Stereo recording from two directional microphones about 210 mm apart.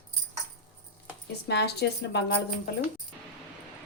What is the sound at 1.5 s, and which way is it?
Speech, 50° left (ahead or behind).